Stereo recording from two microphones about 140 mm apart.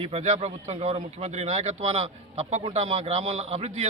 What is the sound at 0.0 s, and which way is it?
A man's voice, 50° right (ahead or behind).